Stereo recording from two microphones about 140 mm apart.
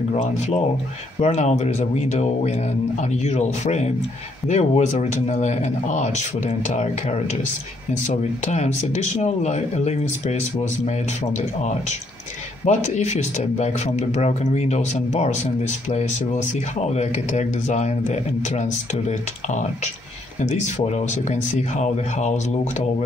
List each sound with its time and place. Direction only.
0.1 s speech: 45° left (ahead or behind)
12.6 s speech: 55° left (ahead or behind)
16.9 s speech: 55° left (ahead or behind)
21.3 s speech: 55° left (ahead or behind)